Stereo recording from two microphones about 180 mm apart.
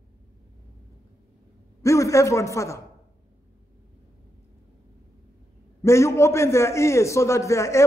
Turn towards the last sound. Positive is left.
turn(degrees=15)  # may be behind; listen again after turning